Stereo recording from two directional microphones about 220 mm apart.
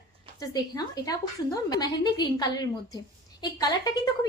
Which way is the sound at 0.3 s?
15° left (ahead or behind).